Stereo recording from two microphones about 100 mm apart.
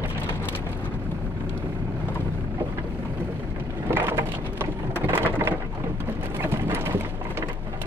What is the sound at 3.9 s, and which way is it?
Rain, 20° right (ahead or behind).